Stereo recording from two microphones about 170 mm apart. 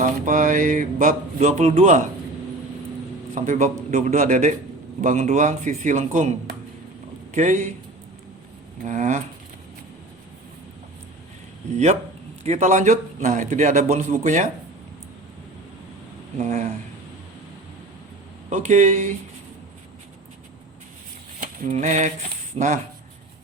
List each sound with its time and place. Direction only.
0.0 s a man's voice: 50° right (ahead or behind)
3.3 s a man's voice: 45° right (ahead or behind)
7.3 s a man's voice: 50° right (ahead or behind)
8.9 s a man's voice: 45° right (ahead or behind)
12.4 s a man's voice: 45° right (ahead or behind)
16.4 s a man's voice: 45° right (ahead or behind)
18.5 s a man's voice: 45° right (ahead or behind)
21.4 s a sound: 50° right (ahead or behind)
22.5 s a man's voice: 45° right (ahead or behind)